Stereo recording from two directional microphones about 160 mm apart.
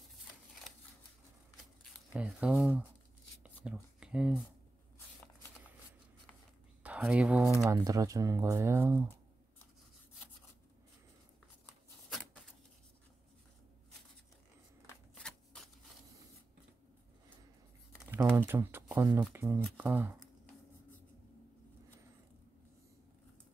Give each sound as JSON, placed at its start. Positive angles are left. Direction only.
{"t": 2.1, "sound": "speech", "side_deg": -5}
{"t": 3.4, "sound": "a sound", "side_deg": -5}
{"t": 6.8, "sound": "speech", "side_deg": -10}
{"t": 7.5, "sound": "speech", "side_deg": -20}
{"t": 15.2, "sound": "shuffling cards", "side_deg": 5}
{"t": 18.3, "sound": "speech", "side_deg": -15}